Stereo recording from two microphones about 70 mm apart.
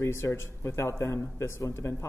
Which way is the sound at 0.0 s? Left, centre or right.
Left.